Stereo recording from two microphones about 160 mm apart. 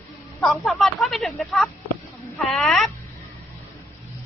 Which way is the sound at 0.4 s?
Centre (ahead or behind).